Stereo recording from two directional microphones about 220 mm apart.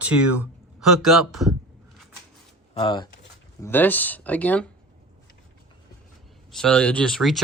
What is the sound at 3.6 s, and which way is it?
Speech, 10° left (ahead or behind).